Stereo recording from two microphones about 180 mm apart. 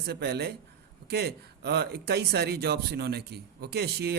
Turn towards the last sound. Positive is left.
turn(degrees=-65)  # may be behind; listen again after turning